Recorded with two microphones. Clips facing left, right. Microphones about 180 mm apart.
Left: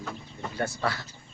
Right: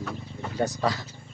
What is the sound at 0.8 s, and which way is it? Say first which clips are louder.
Speech: right 3 dB; 15° right (ahead or behind).